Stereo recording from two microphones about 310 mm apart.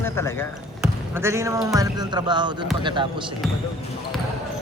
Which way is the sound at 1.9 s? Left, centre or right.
Centre.